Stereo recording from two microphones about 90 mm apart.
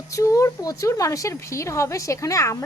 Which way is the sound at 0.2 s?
35° left (ahead or behind).